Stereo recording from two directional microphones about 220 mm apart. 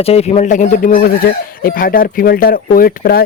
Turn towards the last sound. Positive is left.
turn(degrees=40)  # may be behind; listen again after turning